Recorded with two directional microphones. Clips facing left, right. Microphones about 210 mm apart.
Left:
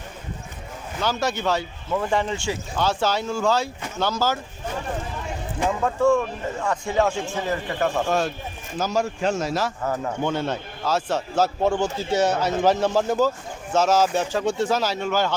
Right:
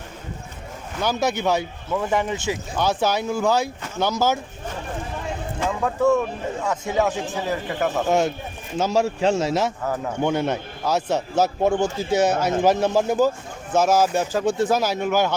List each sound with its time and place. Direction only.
1.0 s a man's voice: 15° right (ahead or behind)
1.9 s a man's voice: 5° right (ahead or behind)
5.8 s a man's voice: 5° right (ahead or behind)
8.0 s a man's voice: 20° right (ahead or behind)